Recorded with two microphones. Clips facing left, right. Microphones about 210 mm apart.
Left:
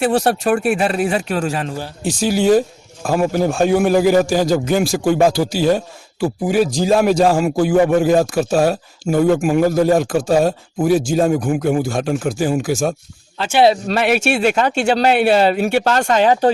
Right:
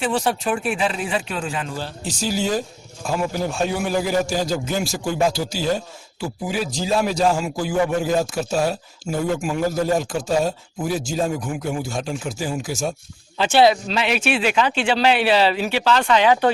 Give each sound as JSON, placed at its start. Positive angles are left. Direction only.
{"t": 0.0, "sound": "a man's voice", "side_deg": 60}
{"t": 2.0, "sound": "a man's voice", "side_deg": 60}
{"t": 13.4, "sound": "speech", "side_deg": 0}
{"t": 13.8, "sound": "speech", "side_deg": 50}